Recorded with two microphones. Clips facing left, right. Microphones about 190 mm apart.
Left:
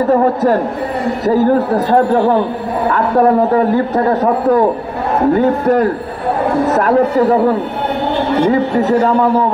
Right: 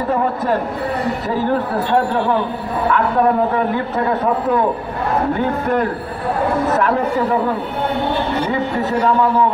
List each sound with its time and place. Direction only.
1.2 s a man's voice: 40° left (ahead or behind)